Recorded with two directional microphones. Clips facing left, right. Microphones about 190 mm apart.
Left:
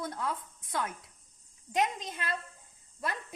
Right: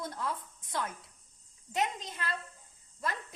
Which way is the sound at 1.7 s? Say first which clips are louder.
Left 3 dB; 15° left (ahead or behind).